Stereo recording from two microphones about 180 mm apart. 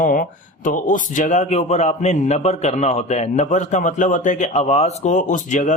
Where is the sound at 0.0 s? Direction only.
45° left (ahead or behind).